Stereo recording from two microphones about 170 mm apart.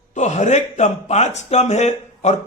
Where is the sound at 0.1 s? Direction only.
45° left (ahead or behind).